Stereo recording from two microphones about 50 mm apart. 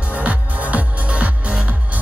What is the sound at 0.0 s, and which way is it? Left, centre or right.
Music, right.